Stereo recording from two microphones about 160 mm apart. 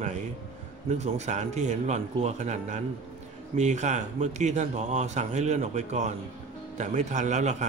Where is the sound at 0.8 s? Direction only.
45° right (ahead or behind).